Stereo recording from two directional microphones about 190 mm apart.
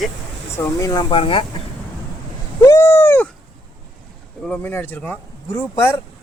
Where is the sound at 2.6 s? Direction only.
15° left (ahead or behind).